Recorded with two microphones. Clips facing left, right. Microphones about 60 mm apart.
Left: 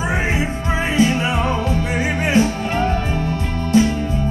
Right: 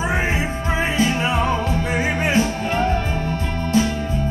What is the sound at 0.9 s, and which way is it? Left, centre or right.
Music, right.